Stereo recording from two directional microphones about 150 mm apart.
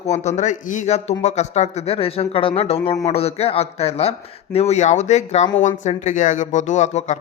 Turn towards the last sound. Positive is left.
turn(degrees=50)  # may be behind; listen again after turning